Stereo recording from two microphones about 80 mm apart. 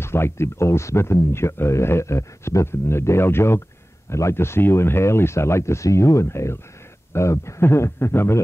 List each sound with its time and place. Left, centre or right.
0.0 s speech: left